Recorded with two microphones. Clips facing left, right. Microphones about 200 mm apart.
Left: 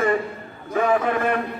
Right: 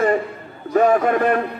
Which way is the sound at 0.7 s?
45° right (ahead or behind).